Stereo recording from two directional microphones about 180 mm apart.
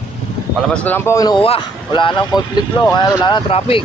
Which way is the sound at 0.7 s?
10° left (ahead or behind).